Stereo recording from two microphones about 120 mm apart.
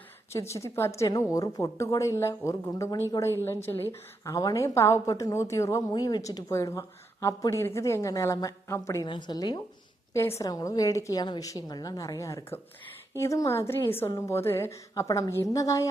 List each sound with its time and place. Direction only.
0.3 s a woman's voice: 25° left (ahead or behind)
5.9 s a woman's voice: 35° left (ahead or behind)
9.0 s a woman's voice: 40° left (ahead or behind)